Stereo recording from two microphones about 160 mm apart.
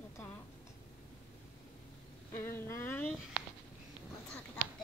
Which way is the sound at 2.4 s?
15° left (ahead or behind).